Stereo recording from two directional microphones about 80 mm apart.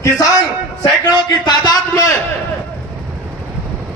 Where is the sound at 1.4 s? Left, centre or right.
Left.